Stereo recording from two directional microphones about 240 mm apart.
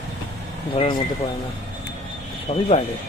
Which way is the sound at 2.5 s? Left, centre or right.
Left.